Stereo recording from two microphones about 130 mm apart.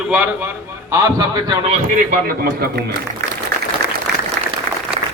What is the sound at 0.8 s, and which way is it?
Speech, 25° right (ahead or behind).